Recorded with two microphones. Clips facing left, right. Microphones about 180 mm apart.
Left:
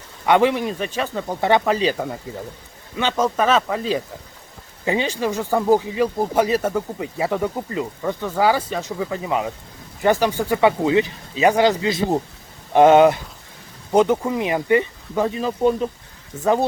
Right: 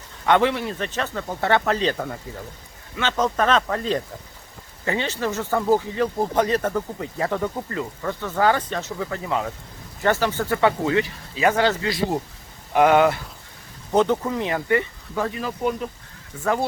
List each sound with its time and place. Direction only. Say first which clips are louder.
0.3 s speech: left 3 dB; 15° left (ahead or behind)